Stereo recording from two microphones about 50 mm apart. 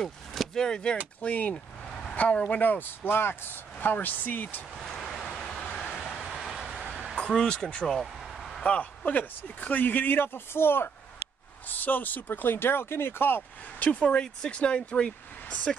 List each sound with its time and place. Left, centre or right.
0.0 s vehicle: centre
0.7 s speech: centre
1.2 s speech: left
2.5 s speech: left
4.7 s vehicle: centre
5.2 s vehicle: centre
6.1 s train: centre
7.2 s speech: centre
8.0 s a sound: centre
8.6 s speech: left
11.6 s speech: left
13.7 s speech: left